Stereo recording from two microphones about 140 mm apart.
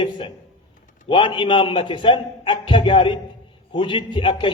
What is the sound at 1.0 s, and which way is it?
A man's voice, 35° left (ahead or behind).